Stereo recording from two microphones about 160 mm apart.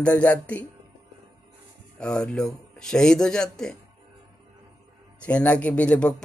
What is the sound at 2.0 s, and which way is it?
Speech, 5° left (ahead or behind).